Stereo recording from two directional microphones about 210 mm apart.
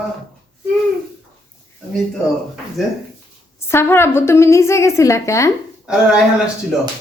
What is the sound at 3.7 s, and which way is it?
Speech, 10° left (ahead or behind).